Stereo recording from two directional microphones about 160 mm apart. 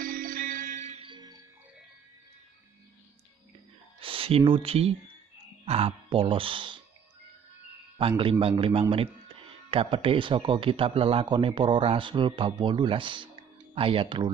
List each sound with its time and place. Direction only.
0.0 s music: 60° right (ahead or behind)
1.0 s cricket: 25° right (ahead or behind)
4.0 s speech: 35° right (ahead or behind)
8.2 s speech: 35° right (ahead or behind)